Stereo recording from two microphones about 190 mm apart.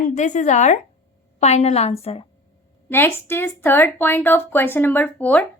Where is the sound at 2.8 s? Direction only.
10° left (ahead or behind).